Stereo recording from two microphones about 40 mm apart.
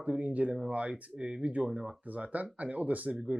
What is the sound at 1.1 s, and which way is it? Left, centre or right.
Speech, centre.